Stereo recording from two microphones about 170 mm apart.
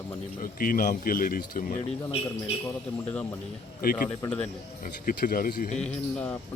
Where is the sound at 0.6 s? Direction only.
50° left (ahead or behind).